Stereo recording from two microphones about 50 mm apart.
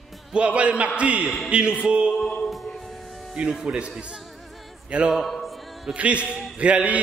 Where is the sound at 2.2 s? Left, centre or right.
Centre.